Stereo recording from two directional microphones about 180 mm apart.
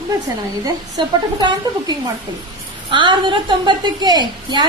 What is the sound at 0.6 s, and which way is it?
A woman's voice, 25° right (ahead or behind).